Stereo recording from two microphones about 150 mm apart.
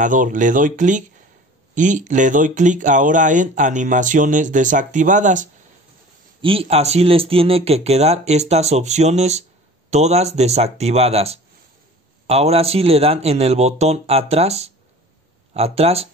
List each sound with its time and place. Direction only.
0.0 s speech: 60° right (ahead or behind)
6.4 s speech: 40° right (ahead or behind)